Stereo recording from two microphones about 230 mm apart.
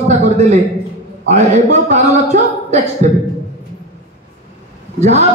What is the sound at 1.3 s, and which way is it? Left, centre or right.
Speech, right.